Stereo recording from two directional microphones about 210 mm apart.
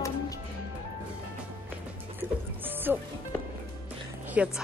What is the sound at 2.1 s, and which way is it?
Music, 10° right (ahead or behind).